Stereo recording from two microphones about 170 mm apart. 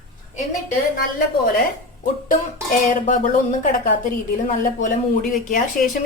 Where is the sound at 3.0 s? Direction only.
50° left (ahead or behind).